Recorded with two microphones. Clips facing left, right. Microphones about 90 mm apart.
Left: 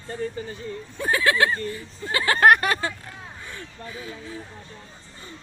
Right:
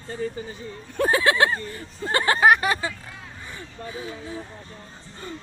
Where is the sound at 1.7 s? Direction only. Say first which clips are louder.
Right 3 dB; 40° right (ahead or behind).